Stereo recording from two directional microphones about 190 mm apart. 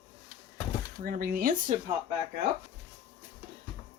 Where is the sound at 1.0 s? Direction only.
45° right (ahead or behind).